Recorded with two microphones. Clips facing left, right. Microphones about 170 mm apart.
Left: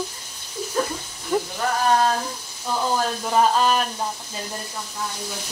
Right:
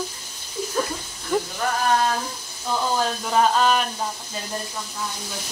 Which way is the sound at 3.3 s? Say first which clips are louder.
Even; 5° left (ahead or behind).